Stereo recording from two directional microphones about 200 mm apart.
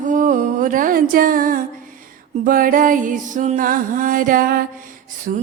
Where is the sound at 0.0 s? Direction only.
40° right (ahead or behind).